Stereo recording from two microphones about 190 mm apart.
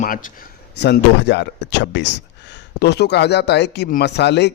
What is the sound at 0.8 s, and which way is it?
Speech, 60° left (ahead or behind).